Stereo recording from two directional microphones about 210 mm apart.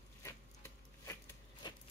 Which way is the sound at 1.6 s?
20° left (ahead or behind).